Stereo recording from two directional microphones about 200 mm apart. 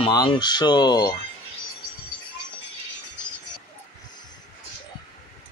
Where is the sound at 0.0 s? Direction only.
20° left (ahead or behind).